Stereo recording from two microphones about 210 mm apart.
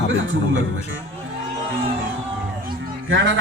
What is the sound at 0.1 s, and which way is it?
Speech, 65° right (ahead or behind).